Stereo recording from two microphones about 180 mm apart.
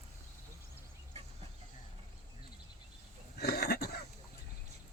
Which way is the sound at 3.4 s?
60° left (ahead or behind).